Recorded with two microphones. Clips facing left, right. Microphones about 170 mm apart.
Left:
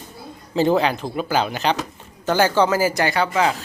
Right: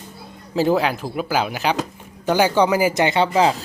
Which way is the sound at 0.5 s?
5° right (ahead or behind).